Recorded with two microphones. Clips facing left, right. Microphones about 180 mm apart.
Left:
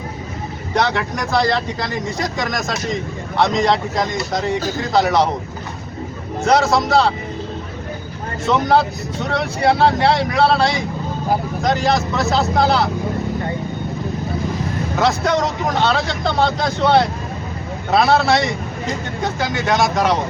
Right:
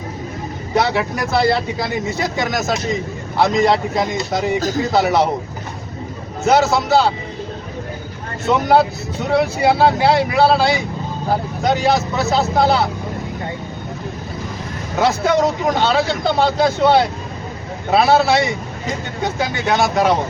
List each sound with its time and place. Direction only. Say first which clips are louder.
0.7 s speech: right 2 dB; 5° right (ahead or behind)
6.4 s speech: right 1 dB; centre (ahead or behind)
8.4 s speech: right 2 dB; centre (ahead or behind)
14.9 s speech: right 2 dB; 5° right (ahead or behind)